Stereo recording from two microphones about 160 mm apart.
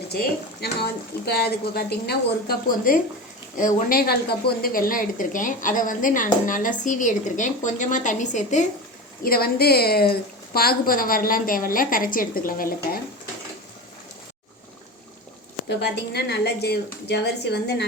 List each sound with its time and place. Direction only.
0.6 s a woman's voice: 85° left; by 8.6 s 50° left (ahead or behind)
9.2 s a woman's voice: 70° left (ahead or behind)
15.7 s speech: 90° left